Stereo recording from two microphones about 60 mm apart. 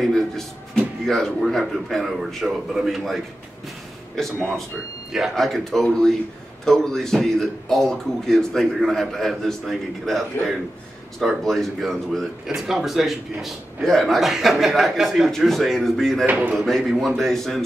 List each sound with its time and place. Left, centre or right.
0.0 s a man's voice: centre
5.3 s a man's voice: centre
12.4 s a man's voice: centre
16.3 s speech: right
16.5 s a man's voice: centre